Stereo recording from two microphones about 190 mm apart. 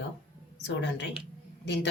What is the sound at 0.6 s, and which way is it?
Speech, 70° left (ahead or behind).